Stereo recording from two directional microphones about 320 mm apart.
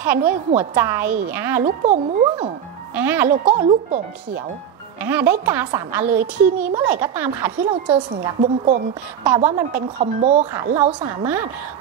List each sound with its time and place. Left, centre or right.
0.0 s a woman's voice: centre
1.9 s a woman's voice: centre
2.9 s a woman's voice: centre
3.4 s speech: right
5.0 s a woman's voice: centre
8.1 s speech: right
9.5 s a woman's voice: centre
9.9 s speech: right
10.5 s a woman's voice: centre